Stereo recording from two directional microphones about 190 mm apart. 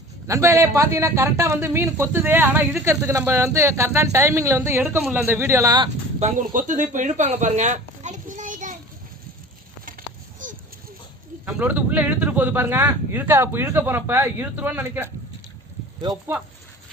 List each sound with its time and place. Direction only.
0.3 s speech: 15° right (ahead or behind)
6.1 s speech: 40° right (ahead or behind)
10.4 s a sound: 45° right (ahead or behind)
11.4 s speech: 10° right (ahead or behind)